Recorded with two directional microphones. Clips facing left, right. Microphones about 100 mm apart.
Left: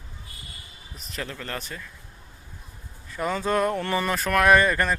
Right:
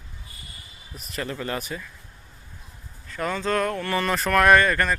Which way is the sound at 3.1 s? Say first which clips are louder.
Even; 15° left (ahead or behind).